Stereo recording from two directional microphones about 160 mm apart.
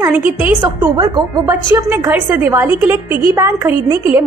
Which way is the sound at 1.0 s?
25° right (ahead or behind).